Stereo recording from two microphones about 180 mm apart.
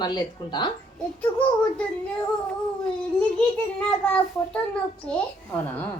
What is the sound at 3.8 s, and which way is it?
A child's voice, 5° left (ahead or behind).